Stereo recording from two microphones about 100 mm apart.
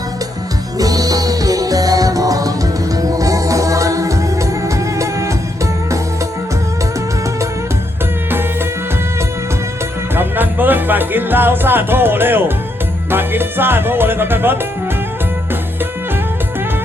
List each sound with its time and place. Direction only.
0.8 s music: 35° right (ahead or behind)
10.2 s music: 20° right (ahead or behind)